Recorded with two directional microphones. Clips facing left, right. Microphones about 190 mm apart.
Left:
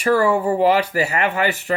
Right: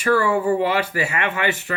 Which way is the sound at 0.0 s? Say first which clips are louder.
Left 2 dB; 35° left (ahead or behind).